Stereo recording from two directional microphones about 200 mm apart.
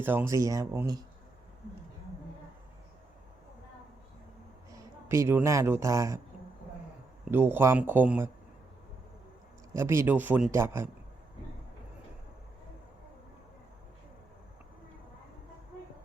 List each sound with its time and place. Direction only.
0.0 s speech: 10° right (ahead or behind)
4.7 s speech: 15° right (ahead or behind)
7.3 s speech: 10° right (ahead or behind)
9.7 s speech: 15° right (ahead or behind)